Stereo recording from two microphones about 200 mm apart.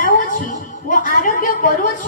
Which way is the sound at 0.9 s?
45° left (ahead or behind).